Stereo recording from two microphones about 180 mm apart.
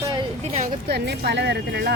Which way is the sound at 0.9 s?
65° right (ahead or behind).